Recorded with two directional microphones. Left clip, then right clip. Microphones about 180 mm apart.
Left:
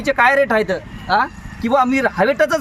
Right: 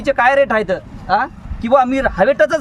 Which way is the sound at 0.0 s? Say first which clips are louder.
Right 1 dB; 35° right (ahead or behind).